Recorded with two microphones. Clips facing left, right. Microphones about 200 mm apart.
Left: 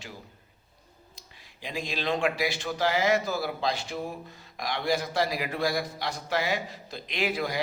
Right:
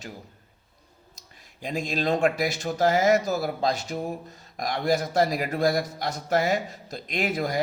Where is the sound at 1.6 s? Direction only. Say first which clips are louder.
Right 5 dB; 45° right (ahead or behind).